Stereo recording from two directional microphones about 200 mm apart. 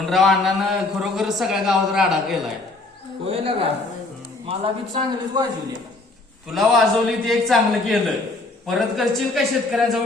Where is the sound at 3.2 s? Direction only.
30° right (ahead or behind).